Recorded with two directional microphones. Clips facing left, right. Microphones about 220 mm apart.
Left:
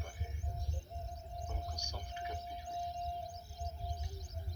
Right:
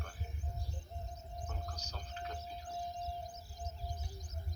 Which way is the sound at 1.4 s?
10° left (ahead or behind).